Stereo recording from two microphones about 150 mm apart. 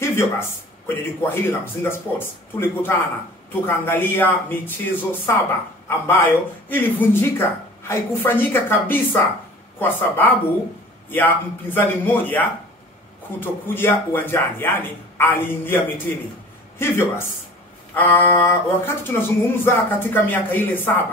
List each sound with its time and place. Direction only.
0.0 s speech: 15° left (ahead or behind)